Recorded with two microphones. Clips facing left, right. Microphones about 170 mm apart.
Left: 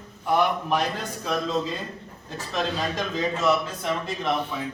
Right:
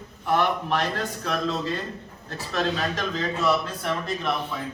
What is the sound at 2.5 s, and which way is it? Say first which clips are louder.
Speech: right 1 dB; 15° left (ahead or behind).